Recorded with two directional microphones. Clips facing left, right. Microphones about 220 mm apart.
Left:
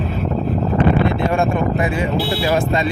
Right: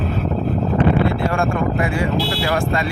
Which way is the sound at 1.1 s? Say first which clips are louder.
Left 2 dB; 20° left (ahead or behind).